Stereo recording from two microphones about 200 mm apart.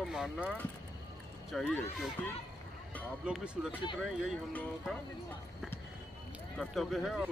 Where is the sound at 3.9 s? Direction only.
Centre (ahead or behind).